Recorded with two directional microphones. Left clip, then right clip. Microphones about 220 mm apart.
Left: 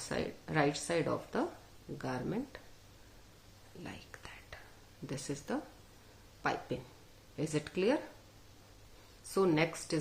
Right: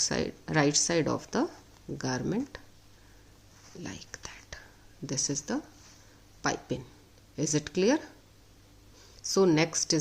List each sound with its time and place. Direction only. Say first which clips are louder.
0.1 s speech: right 6 dB; 45° right (ahead or behind)
3.8 s whispering: right 6 dB; 40° right (ahead or behind)
5.0 s speech: right 8 dB; 40° right (ahead or behind)
9.3 s speech: right 6 dB; 40° right (ahead or behind)